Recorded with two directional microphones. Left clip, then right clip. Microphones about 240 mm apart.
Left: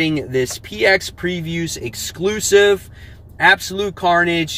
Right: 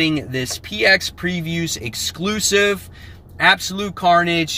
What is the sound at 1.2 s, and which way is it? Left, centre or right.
Speech, centre.